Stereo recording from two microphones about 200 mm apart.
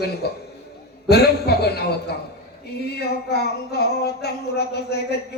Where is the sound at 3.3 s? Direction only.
55° left (ahead or behind).